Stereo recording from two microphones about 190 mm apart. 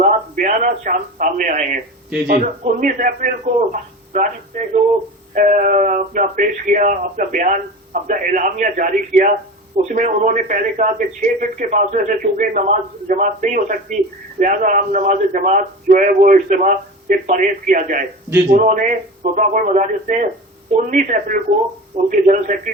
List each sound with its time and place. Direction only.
0.0 s a man's voice: 45° right (ahead or behind)